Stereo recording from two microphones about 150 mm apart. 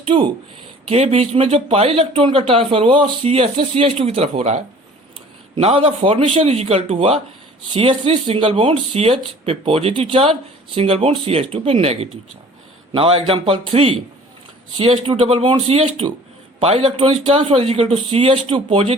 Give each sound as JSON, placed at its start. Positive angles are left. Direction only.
{"t": 0.0, "sound": "speech", "side_deg": -35}